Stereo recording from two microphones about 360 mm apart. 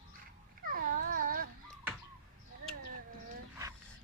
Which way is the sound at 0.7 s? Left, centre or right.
Right.